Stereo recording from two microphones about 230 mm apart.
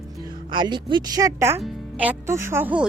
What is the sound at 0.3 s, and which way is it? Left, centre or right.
Speech, centre.